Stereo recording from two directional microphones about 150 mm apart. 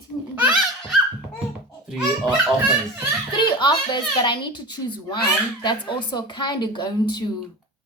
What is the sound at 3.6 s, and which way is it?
Speech, 30° left (ahead or behind).